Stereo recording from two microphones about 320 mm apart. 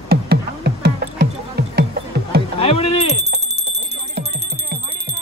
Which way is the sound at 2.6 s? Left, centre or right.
Centre.